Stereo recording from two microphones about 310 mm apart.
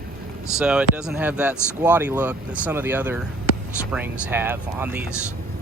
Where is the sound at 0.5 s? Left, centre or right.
Centre.